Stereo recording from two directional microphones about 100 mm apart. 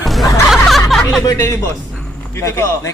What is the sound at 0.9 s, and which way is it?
Music, centre (ahead or behind).